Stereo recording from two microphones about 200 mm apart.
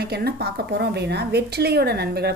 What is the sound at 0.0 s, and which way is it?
A woman's voice, 55° right (ahead or behind).